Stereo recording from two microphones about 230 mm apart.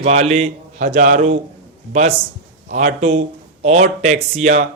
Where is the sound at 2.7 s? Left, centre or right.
Right.